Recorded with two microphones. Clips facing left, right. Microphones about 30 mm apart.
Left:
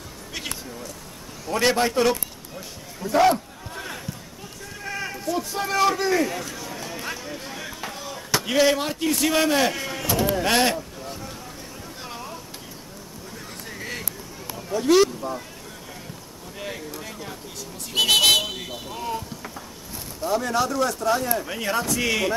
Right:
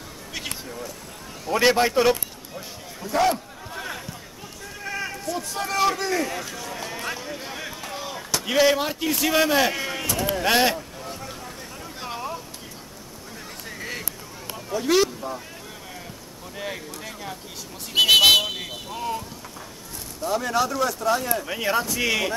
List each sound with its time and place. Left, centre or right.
0.5 s speech: centre
1.4 s a sound: centre
4.7 s sheep: centre
7.9 s chop: centre
8.5 s speech: centre
10.3 s a sound: centre
13.7 s a sound: centre
14.7 s speech: centre
16.5 s speech: centre
20.2 s speech: centre